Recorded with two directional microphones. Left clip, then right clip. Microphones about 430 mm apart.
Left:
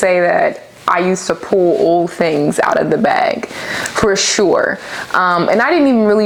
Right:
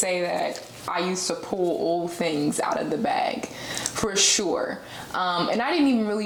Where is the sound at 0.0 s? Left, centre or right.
Left.